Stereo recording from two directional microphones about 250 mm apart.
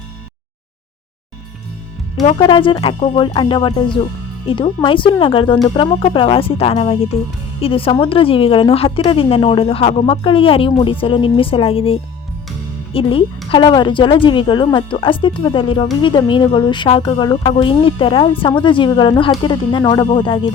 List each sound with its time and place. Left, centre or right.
2.4 s speech: centre